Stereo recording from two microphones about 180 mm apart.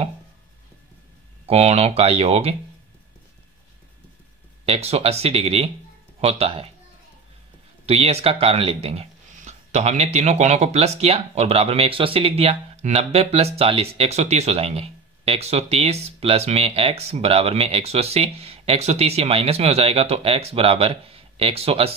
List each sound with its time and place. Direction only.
1.4 s speech: 35° right (ahead or behind)
4.6 s speech: 35° right (ahead or behind)
7.8 s speech: 35° right (ahead or behind)